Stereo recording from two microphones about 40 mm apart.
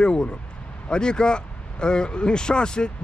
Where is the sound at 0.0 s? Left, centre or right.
Left.